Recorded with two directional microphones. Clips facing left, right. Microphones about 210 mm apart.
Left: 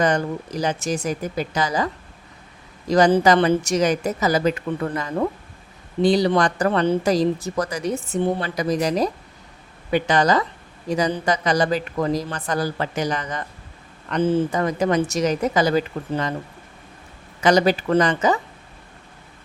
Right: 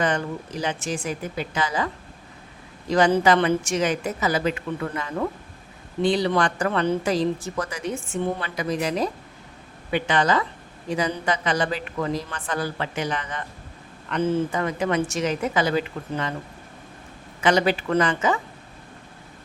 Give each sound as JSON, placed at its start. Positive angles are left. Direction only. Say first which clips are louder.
{"t": 0.0, "sound": "speech", "louder": "left 4 dB", "side_deg": 40}
{"t": 2.9, "sound": "speech", "louder": "left 3 dB", "side_deg": 40}
{"t": 17.4, "sound": "speech", "louder": "left 3 dB", "side_deg": 40}